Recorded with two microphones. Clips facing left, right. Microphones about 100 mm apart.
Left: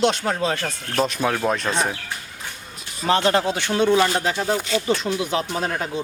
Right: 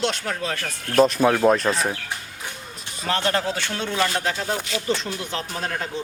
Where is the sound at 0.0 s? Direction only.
20° left (ahead or behind).